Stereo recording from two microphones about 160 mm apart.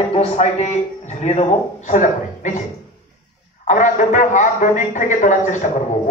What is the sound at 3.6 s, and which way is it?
A man's voice, 50° left (ahead or behind).